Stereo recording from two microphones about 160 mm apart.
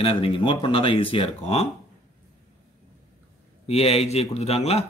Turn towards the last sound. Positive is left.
turn(degrees=40)  # may be behind; listen again after turning